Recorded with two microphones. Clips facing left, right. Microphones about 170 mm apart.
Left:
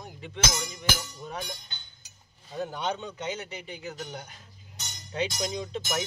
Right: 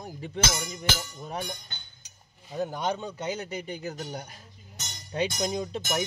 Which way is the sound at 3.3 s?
35° right (ahead or behind).